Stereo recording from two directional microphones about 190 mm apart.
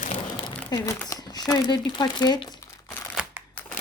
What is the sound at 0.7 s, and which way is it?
Speech, 20° left (ahead or behind).